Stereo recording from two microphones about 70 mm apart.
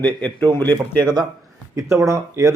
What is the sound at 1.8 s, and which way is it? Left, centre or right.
Speech, right.